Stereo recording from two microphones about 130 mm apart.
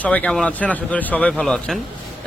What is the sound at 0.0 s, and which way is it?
Speech, 10° left (ahead or behind).